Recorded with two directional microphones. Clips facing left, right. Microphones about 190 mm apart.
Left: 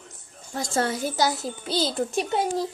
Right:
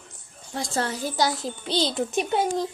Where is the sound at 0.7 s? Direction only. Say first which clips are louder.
Left 2 dB; 50° left (ahead or behind).